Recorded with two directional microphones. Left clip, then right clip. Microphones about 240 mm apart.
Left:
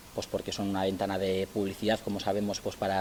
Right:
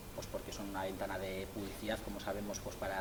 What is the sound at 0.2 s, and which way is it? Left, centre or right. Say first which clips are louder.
Speech: left 11 dB; left.